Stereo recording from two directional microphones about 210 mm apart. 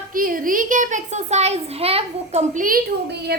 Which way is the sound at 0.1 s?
40° right (ahead or behind).